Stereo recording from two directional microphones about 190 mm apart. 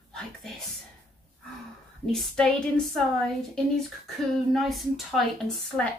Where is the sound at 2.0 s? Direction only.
Centre (ahead or behind).